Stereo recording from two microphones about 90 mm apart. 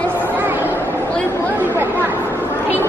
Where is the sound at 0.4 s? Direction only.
20° right (ahead or behind).